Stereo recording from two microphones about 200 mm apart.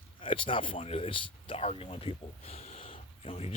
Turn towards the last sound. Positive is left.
turn(degrees=30)  # may be behind; listen again after turning